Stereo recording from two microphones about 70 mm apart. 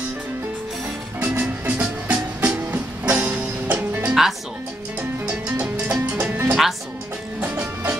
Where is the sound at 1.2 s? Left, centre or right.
Right.